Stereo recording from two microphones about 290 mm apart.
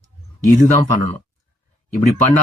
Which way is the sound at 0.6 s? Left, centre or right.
Left.